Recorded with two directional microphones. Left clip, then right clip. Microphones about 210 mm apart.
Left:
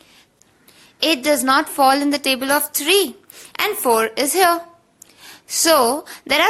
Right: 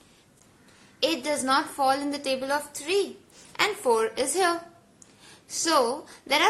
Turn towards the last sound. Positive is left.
turn(degrees=30)  # may be behind; listen again after turning